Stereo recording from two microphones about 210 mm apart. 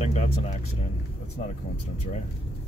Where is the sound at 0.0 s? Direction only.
30° left (ahead or behind).